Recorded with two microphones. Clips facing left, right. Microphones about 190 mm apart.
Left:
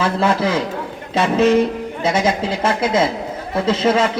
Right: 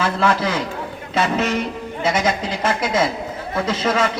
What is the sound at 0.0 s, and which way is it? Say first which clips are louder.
Speech: left 2 dB; 25° left (ahead or behind).